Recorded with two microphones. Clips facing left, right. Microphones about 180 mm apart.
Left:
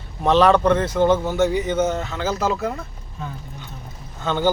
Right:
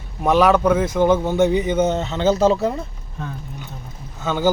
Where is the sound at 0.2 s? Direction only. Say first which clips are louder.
Even; 10° right (ahead or behind); by 2.8 s 25° right (ahead or behind).